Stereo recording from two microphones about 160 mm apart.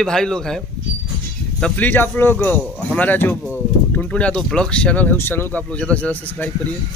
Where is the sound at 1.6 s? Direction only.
10° left (ahead or behind).